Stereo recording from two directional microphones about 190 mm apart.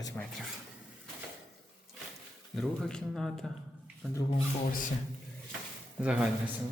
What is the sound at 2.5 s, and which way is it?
Speech, 5° left (ahead or behind).